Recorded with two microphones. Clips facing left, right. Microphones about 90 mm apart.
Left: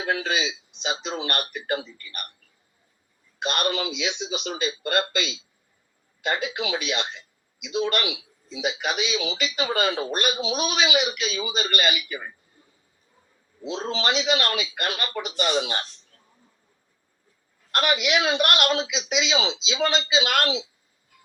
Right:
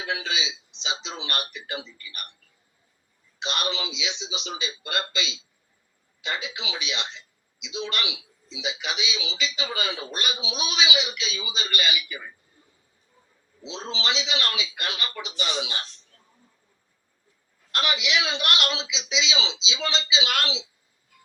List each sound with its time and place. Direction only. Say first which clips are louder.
0.0 s a man's voice: left 5 dB; 50° left (ahead or behind)
3.4 s a man's voice: left 4 dB; 50° left (ahead or behind)
13.6 s a man's voice: left 5 dB; 50° left (ahead or behind)
17.7 s a man's voice: left 4 dB; 50° left (ahead or behind)